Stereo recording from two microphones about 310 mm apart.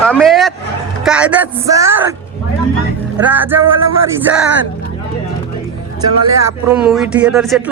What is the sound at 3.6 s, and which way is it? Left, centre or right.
Music, right.